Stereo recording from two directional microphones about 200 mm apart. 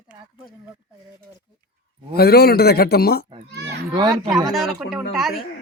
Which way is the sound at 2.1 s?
50° left (ahead or behind).